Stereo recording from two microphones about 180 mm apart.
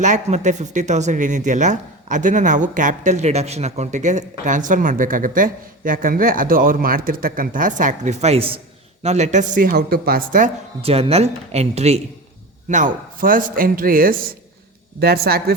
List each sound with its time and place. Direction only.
0.0 s speech: 40° right (ahead or behind)
10.8 s speech: 35° right (ahead or behind); by 15.5 s 60° right (ahead or behind)